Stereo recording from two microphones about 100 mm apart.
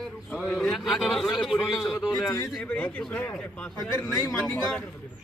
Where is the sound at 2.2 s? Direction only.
30° left (ahead or behind).